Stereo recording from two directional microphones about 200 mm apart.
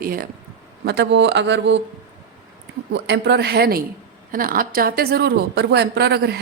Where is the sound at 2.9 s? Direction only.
60° right (ahead or behind).